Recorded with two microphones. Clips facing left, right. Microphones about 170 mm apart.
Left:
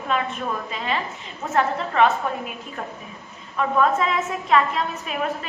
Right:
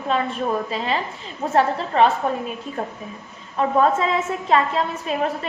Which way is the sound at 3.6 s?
30° right (ahead or behind).